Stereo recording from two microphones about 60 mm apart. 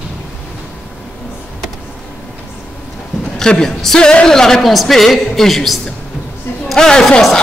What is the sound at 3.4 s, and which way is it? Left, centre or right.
A woman's voice, centre.